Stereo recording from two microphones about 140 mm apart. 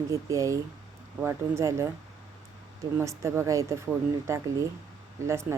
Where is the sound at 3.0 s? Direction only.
20° right (ahead or behind).